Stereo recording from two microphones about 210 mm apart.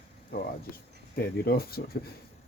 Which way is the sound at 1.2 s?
45° left (ahead or behind).